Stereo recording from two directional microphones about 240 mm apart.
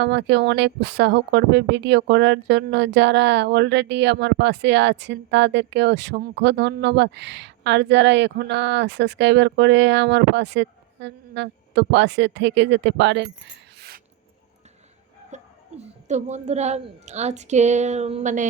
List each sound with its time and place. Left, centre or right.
0.0 s speech: right
15.3 s a sound: right
15.8 s a woman's voice: right